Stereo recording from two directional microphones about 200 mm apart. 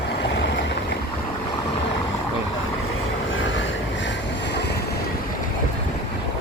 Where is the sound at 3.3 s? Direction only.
70° left (ahead or behind).